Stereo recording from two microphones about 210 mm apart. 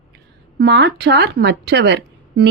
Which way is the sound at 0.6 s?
55° right (ahead or behind).